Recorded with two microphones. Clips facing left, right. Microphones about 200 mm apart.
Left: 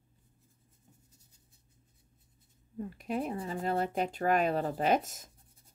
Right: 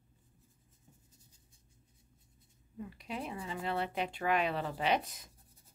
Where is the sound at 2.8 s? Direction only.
45° left (ahead or behind).